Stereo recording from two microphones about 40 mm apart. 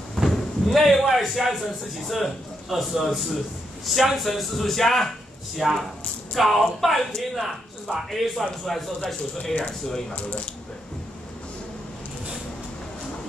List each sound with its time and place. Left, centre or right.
0.2 s a sound: centre
2.0 s a man's voice: centre
5.6 s a man's voice: centre